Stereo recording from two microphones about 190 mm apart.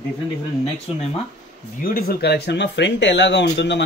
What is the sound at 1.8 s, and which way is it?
Speech, 50° left (ahead or behind).